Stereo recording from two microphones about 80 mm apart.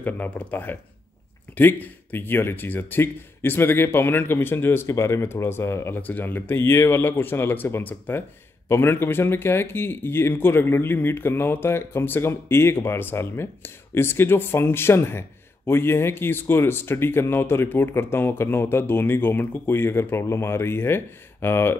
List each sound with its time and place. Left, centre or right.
0.0 s speech: left
5.9 s speech: left